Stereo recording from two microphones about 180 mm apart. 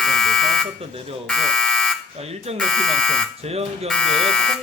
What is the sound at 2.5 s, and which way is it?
Speech, 5° left (ahead or behind).